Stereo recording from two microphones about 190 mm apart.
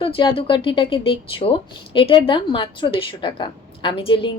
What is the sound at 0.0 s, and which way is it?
A woman's voice, 25° left (ahead or behind).